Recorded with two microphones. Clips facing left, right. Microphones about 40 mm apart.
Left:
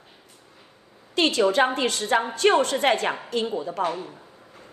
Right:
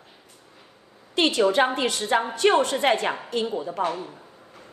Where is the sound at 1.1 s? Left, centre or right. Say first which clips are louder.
Even; left.